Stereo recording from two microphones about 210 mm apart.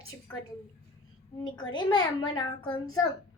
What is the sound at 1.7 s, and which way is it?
A woman's voice, 20° left (ahead or behind).